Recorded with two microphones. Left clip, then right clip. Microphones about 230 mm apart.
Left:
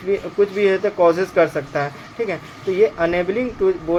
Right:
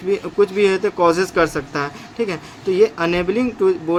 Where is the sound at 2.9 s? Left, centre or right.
Right.